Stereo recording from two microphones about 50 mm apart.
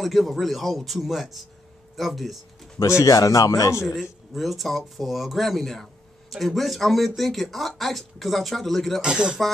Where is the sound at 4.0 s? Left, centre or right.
Centre.